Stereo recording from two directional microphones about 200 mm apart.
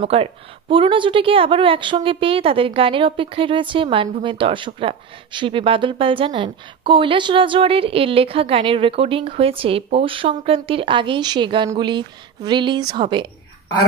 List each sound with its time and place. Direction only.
0.0 s a woman's voice: 30° right (ahead or behind)